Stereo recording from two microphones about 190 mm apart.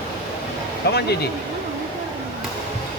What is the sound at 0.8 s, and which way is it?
Speech, 60° left (ahead or behind).